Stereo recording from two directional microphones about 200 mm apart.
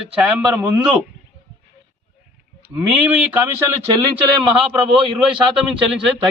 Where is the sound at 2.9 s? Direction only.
10° right (ahead or behind).